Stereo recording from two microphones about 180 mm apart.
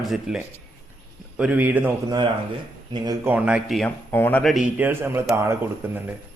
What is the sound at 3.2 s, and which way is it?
Speech, 10° right (ahead or behind).